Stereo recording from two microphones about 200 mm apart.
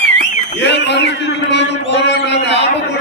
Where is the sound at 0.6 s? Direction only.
60° left (ahead or behind).